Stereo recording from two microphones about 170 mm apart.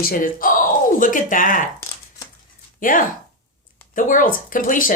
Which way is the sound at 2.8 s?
55° left (ahead or behind).